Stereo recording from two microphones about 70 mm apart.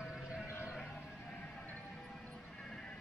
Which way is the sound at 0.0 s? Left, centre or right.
Centre.